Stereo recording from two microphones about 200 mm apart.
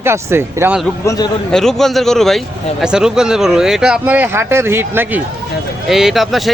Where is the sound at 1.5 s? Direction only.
Centre (ahead or behind).